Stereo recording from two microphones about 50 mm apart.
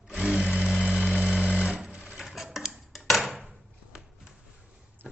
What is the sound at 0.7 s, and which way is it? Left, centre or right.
Vehicle, centre.